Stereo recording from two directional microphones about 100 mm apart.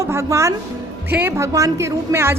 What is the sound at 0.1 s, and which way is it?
A woman's voice, 30° right (ahead or behind).